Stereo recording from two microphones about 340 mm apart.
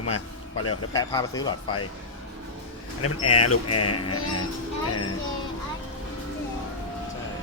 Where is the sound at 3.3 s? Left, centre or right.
Left.